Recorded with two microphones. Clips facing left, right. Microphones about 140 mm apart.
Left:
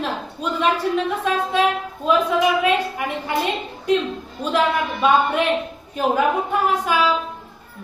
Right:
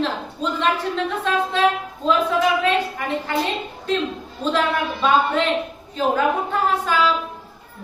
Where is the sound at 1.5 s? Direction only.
10° left (ahead or behind).